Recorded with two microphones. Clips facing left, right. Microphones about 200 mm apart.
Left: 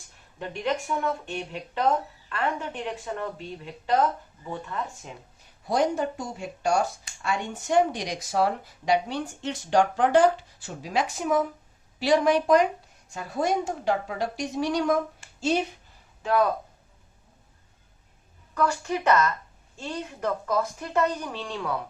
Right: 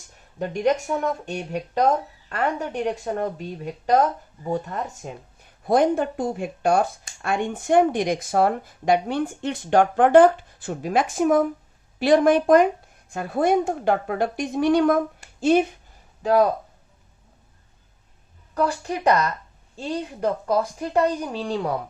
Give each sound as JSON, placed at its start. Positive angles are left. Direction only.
{"t": 0.3, "sound": "a woman's voice", "side_deg": -40}
{"t": 5.6, "sound": "a woman's voice", "side_deg": -55}
{"t": 15.2, "sound": "a sound", "side_deg": -55}
{"t": 16.2, "sound": "speech", "side_deg": -35}
{"t": 18.5, "sound": "speech", "side_deg": -35}